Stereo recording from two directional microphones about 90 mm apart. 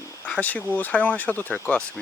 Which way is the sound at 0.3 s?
15° left (ahead or behind).